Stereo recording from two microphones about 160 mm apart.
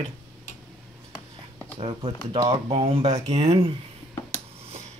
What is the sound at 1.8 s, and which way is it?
Speech, 35° right (ahead or behind).